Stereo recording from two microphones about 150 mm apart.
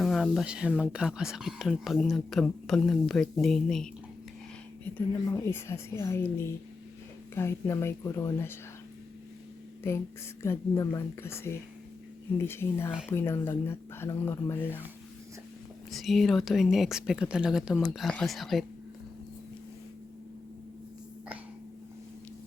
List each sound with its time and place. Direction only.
0.0 s speech: centre (ahead or behind)
5.5 s speech: 15° left (ahead or behind)
9.8 s speech: 15° left (ahead or behind)
15.9 s speech: centre (ahead or behind)